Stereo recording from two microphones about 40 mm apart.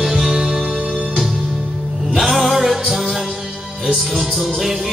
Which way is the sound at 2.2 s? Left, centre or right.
Centre.